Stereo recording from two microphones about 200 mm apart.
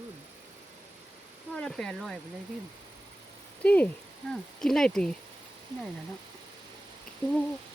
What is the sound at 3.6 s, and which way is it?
Speech, 5° left (ahead or behind).